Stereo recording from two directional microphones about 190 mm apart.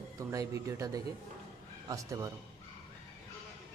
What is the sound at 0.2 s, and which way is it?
Speech, 15° right (ahead or behind).